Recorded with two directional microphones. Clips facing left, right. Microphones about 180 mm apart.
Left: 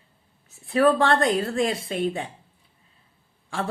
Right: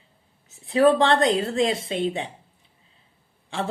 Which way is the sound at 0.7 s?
25° right (ahead or behind).